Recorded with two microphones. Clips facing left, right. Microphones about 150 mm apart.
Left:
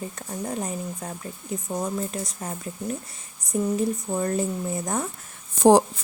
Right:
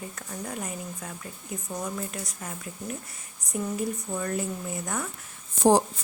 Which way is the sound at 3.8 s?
35° left (ahead or behind).